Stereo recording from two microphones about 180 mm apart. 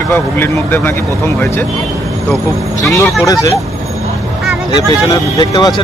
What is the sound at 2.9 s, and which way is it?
Speech, 15° left (ahead or behind).